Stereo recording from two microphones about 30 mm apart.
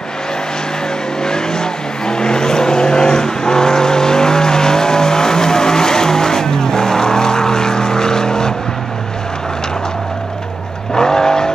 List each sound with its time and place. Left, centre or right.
1.2 s vehicle: left
11.0 s vehicle: left